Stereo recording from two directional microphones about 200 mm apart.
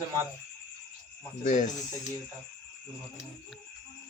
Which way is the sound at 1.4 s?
40° left (ahead or behind).